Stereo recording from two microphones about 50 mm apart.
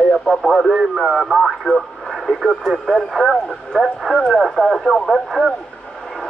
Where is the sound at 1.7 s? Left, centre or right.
Left.